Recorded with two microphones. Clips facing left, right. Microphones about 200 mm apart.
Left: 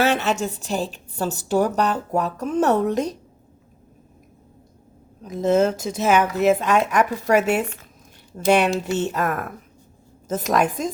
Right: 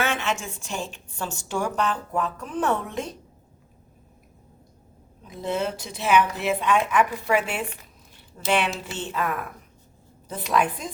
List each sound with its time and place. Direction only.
0.0 s a woman's voice: 35° left (ahead or behind)
5.2 s speech: 45° left (ahead or behind)